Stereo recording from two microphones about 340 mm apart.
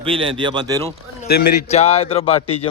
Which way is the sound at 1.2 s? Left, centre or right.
Left.